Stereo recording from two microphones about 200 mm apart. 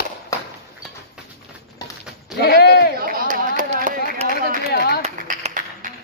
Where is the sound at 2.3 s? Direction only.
55° left (ahead or behind).